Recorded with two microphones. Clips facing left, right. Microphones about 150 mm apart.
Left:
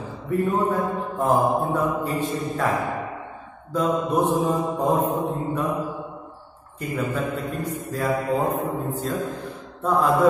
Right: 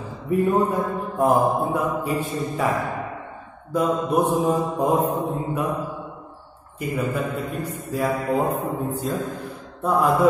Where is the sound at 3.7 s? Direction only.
10° right (ahead or behind).